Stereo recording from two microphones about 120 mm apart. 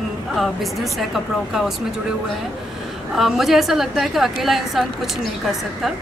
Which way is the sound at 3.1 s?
Centre (ahead or behind).